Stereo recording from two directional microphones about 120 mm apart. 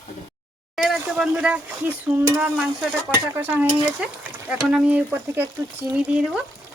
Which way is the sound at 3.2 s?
15° right (ahead or behind).